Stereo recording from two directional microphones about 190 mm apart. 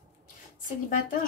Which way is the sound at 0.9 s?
45° left (ahead or behind).